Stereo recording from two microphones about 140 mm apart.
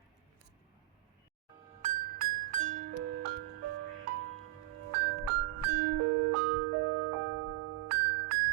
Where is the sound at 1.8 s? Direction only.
80° right.